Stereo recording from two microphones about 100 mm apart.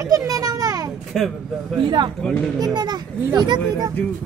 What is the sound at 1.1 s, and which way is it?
Speech, 5° left (ahead or behind).